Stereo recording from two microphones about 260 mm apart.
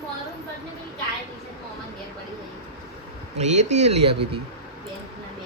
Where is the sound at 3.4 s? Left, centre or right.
Right.